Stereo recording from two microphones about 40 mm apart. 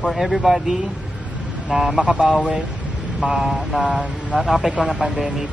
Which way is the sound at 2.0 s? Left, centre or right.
Centre.